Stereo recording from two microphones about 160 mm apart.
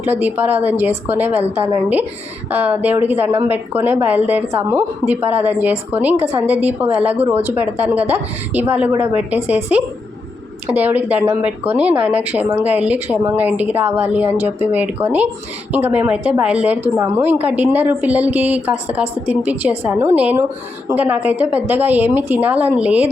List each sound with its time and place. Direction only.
0.0 s speech: 10° right (ahead or behind)
6.1 s a woman's voice: 40° right (ahead or behind)
6.4 s speech: 10° right (ahead or behind)
10.8 s speech: 10° right (ahead or behind)